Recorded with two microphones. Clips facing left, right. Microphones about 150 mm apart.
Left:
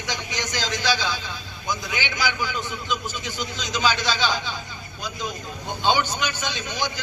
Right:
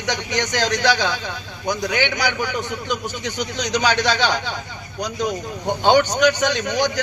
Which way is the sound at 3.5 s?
75° right (ahead or behind).